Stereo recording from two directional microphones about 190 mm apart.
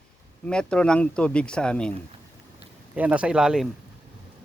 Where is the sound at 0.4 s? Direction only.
5° left (ahead or behind).